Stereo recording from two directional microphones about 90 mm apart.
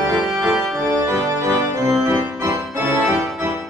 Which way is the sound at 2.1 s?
30° right (ahead or behind).